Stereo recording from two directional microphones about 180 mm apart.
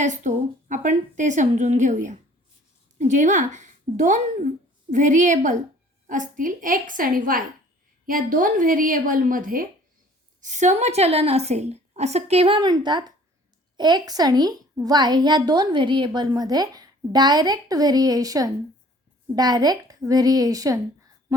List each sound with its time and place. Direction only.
0.0 s a woman's voice: 45° right (ahead or behind); by 20.7 s 20° right (ahead or behind)